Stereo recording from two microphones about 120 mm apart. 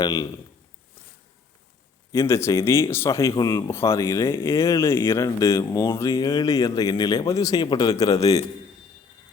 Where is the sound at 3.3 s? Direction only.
35° left (ahead or behind).